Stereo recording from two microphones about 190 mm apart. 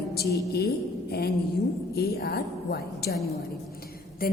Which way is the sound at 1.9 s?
55° left (ahead or behind).